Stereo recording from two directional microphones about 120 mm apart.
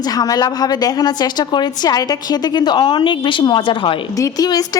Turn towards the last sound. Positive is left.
turn(degrees=30)  # may be behind; listen again after turning